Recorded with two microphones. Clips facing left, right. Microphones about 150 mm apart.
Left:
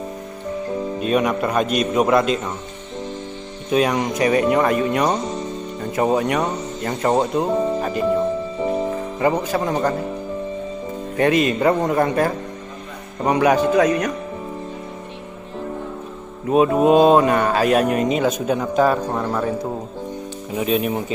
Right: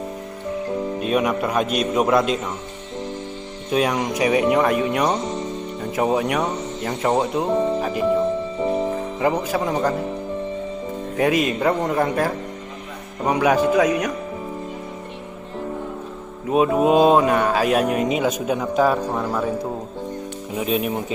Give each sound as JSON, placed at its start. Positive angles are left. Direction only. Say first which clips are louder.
{"t": 0.9, "sound": "speech", "louder": "left 2 dB", "side_deg": 0}
{"t": 3.7, "sound": "speech", "louder": "left 2 dB", "side_deg": 0}
{"t": 7.8, "sound": "speech", "louder": "even", "side_deg": -5}
{"t": 8.5, "sound": "music", "louder": "even", "side_deg": 5}
{"t": 11.1, "sound": "speech", "louder": "left 2 dB", "side_deg": -5}
{"t": 16.4, "sound": "speech", "louder": "left 2 dB", "side_deg": 0}